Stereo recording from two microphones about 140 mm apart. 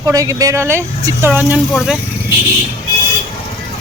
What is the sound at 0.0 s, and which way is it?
Speech, 25° right (ahead or behind).